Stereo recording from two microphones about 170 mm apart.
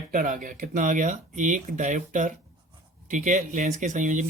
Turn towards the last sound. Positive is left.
turn(degrees=-50)  # may be behind; listen again after turning